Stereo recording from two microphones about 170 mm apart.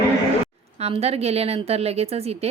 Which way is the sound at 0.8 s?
35° right (ahead or behind).